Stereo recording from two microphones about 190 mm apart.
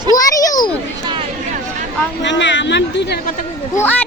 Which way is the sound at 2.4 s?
75° left (ahead or behind).